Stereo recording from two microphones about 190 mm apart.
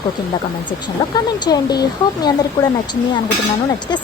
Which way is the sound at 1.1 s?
20° left (ahead or behind).